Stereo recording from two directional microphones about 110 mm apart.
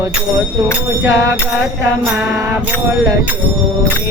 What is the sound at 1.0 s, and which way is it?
Music, 30° right (ahead or behind).